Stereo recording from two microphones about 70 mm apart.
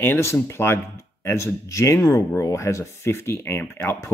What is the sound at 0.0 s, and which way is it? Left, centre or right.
Speech, left.